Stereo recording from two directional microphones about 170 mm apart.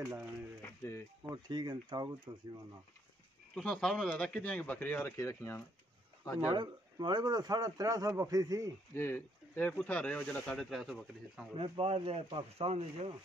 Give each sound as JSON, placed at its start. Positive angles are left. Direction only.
{"t": 0.6, "sound": "a sound", "side_deg": 15}
{"t": 1.3, "sound": "a man's voice", "side_deg": -25}
{"t": 3.5, "sound": "speech", "side_deg": 5}
{"t": 6.4, "sound": "a man's voice", "side_deg": -25}
{"t": 8.9, "sound": "speech", "side_deg": 15}
{"t": 11.5, "sound": "speech", "side_deg": -30}